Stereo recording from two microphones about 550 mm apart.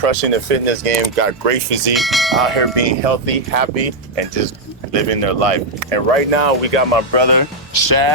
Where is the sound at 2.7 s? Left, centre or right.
Right.